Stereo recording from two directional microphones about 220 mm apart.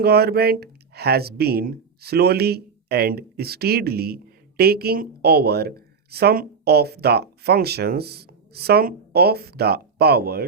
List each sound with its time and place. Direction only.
0.0 s speech: 45° right (ahead or behind)